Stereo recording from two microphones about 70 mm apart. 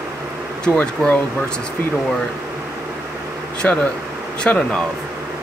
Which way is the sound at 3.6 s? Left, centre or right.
Centre.